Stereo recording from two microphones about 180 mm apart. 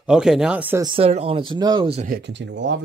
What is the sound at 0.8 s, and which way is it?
Speech, 30° right (ahead or behind).